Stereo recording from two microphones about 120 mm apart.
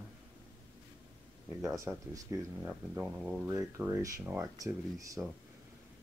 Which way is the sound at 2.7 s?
5° right (ahead or behind).